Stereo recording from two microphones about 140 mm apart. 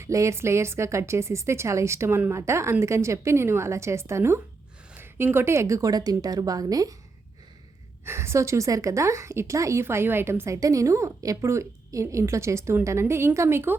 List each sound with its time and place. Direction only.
0.0 s a woman's voice: 20° right (ahead or behind)
8.0 s a woman's voice: 20° right (ahead or behind)